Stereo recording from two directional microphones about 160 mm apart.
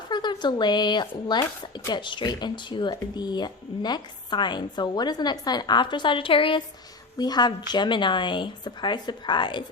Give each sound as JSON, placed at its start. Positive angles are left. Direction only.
{"t": 0.1, "sound": "speech", "side_deg": 30}